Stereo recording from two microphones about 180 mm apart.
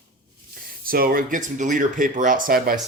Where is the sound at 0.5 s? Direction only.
55° right (ahead or behind).